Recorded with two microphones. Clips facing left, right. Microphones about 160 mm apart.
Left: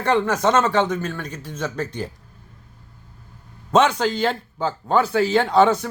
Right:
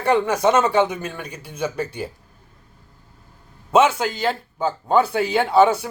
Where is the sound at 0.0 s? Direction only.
10° right (ahead or behind).